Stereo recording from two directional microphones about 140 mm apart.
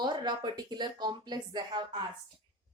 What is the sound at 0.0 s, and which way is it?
A woman's voice, 30° right (ahead or behind).